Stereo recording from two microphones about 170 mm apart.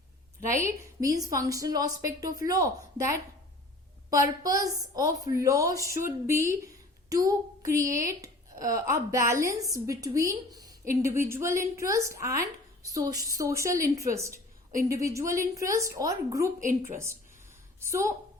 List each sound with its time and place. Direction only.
1.0 s a woman's voice: 20° right (ahead or behind)
7.3 s child singing: 20° right (ahead or behind)
7.9 s a woman's voice: 20° right (ahead or behind)
16.6 s a woman's voice: 50° right (ahead or behind)
17.7 s a woman's voice: 15° right (ahead or behind)